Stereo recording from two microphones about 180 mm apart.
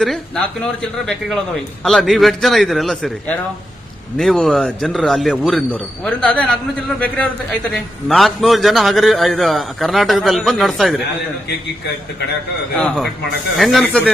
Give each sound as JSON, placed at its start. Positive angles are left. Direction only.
{"t": 0.6, "sound": "a man's voice", "side_deg": 5}
{"t": 7.7, "sound": "a man's voice", "side_deg": 0}
{"t": 12.7, "sound": "a man's voice", "side_deg": 5}